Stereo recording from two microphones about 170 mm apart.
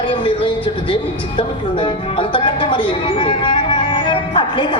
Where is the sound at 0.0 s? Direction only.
30° left (ahead or behind).